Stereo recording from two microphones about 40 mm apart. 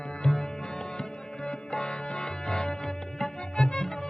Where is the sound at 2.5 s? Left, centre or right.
Centre.